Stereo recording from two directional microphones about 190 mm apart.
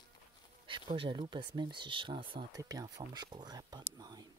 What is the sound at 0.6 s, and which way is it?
Speech, 25° right (ahead or behind).